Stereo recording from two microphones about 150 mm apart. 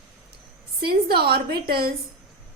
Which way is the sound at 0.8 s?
90° right.